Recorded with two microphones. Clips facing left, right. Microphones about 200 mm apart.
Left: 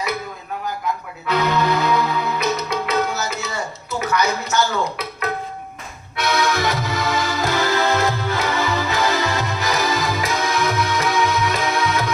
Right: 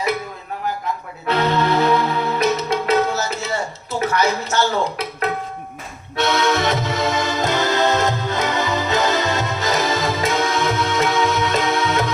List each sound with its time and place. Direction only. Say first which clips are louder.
1.3 s music: right 1 dB; 30° right (ahead or behind)
4.0 s speech: right 2 dB; 30° right (ahead or behind)
6.1 s music: right 2 dB; 25° right (ahead or behind)